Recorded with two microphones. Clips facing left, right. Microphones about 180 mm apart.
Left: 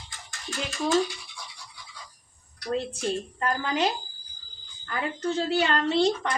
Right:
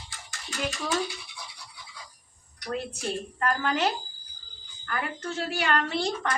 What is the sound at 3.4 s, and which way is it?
Speech, 15° left (ahead or behind).